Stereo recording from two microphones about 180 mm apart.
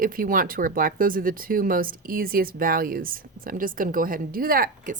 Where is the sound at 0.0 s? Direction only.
50° right (ahead or behind).